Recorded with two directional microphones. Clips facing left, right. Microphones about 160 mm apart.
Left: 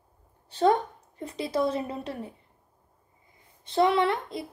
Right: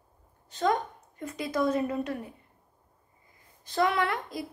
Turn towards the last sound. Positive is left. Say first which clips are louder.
# left 4 dB
turn(degrees=25)  # may be behind; listen again after turning